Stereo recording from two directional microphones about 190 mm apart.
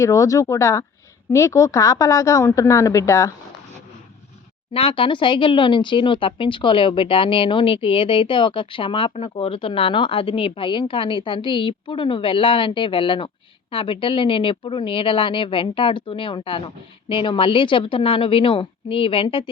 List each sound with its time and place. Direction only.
0.0 s a woman's voice: 15° left (ahead or behind)
4.7 s speech: 30° left (ahead or behind)